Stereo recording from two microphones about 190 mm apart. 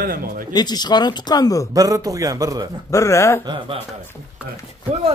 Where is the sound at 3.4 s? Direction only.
25° right (ahead or behind).